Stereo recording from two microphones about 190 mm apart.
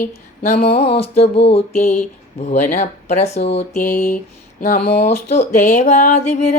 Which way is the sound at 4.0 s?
45° left (ahead or behind).